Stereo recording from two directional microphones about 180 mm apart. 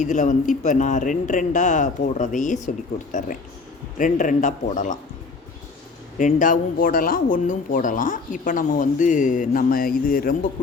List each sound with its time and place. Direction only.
0.0 s speech: 45° left (ahead or behind)
6.1 s speech: 45° left (ahead or behind)